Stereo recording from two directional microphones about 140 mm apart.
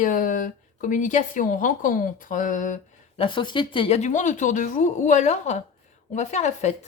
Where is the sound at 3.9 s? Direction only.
55° left (ahead or behind).